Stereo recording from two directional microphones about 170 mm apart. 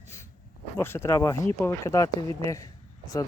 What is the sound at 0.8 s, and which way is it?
Speech, 15° left (ahead or behind).